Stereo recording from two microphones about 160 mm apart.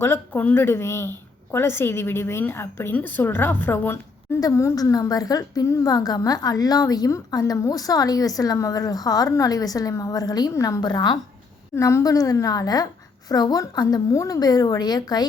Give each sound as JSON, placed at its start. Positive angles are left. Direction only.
{"t": 0.0, "sound": "a woman's voice", "side_deg": 15}